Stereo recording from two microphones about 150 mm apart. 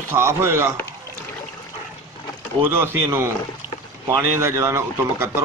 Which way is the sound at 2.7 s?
15° right (ahead or behind).